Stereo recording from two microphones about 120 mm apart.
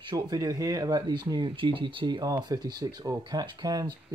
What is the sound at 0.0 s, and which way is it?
Speech, 35° right (ahead or behind).